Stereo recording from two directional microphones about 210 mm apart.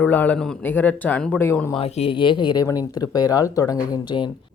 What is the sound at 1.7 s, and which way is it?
Speech, 25° left (ahead or behind).